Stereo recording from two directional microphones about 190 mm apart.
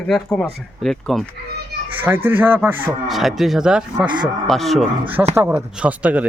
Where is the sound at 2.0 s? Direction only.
10° right (ahead or behind).